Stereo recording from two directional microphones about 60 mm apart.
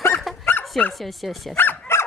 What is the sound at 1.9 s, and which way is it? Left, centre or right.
Fowl, left.